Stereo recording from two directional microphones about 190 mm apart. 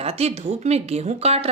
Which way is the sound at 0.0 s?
35° right (ahead or behind).